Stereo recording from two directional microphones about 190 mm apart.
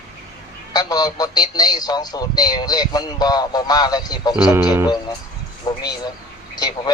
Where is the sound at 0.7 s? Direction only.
20° left (ahead or behind).